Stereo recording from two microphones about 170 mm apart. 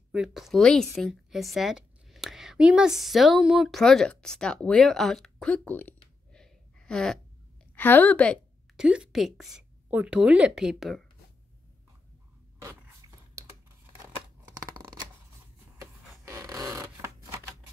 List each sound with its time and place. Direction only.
0.1 s a woman's voice: 5° right (ahead or behind)
8.7 s a woman's voice: 5° right (ahead or behind)
12.6 s a sound: 20° right (ahead or behind)
16.3 s zipper: 15° right (ahead or behind)